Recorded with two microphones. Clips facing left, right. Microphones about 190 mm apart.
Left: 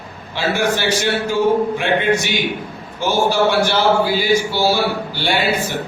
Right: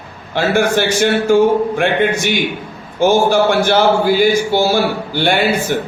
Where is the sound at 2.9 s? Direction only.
50° right (ahead or behind).